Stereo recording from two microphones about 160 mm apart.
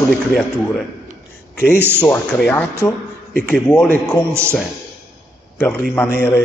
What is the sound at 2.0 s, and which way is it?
A man's voice, 10° left (ahead or behind).